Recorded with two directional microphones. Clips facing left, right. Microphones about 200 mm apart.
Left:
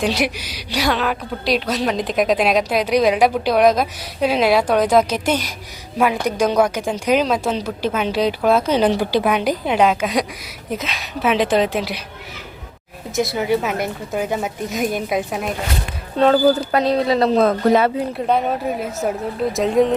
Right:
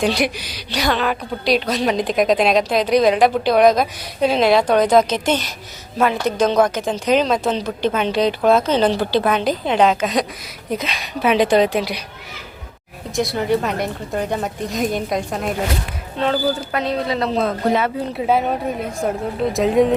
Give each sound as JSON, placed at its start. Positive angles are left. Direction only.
{"t": 0.0, "sound": "a woman's voice", "side_deg": 5}
{"t": 13.1, "sound": "a woman's voice", "side_deg": 0}
{"t": 16.1, "sound": "speech", "side_deg": 40}
{"t": 18.1, "sound": "a woman's voice", "side_deg": -5}